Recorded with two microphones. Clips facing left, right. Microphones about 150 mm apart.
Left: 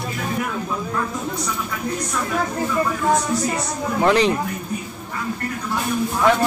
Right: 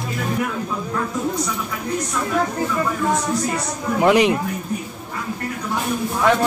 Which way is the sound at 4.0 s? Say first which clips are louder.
Right 2 dB; 10° right (ahead or behind).